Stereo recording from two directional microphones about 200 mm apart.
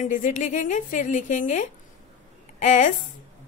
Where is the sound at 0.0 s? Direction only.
40° left (ahead or behind).